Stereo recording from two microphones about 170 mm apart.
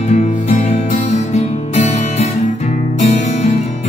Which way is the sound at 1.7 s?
40° left (ahead or behind).